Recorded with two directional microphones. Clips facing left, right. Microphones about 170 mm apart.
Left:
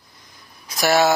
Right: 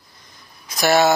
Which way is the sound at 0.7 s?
5° left (ahead or behind).